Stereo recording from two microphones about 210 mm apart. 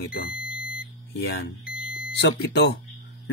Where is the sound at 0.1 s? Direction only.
45° left (ahead or behind).